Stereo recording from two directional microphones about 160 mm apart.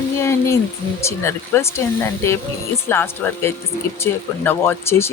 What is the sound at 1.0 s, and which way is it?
Speech, 15° left (ahead or behind).